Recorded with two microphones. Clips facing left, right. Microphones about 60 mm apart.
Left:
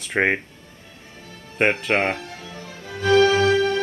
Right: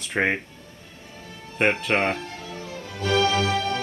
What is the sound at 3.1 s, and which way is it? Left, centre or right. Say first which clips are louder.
Music: left 6 dB; left.